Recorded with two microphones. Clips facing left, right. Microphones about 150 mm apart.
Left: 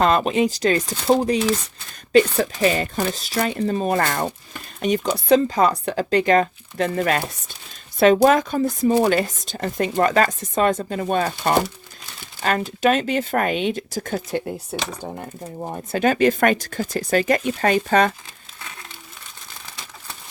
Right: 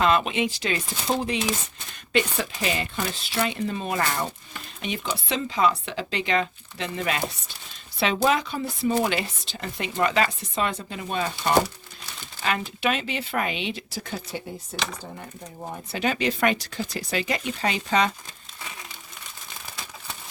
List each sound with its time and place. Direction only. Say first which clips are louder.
0.0 s speech: left 4 dB; 40° left (ahead or behind); by 14.8 s 60° left (ahead or behind)
15.9 s speech: left 8 dB; 45° left (ahead or behind)